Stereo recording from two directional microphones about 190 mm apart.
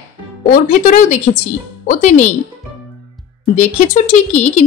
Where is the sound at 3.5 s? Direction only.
40° left (ahead or behind).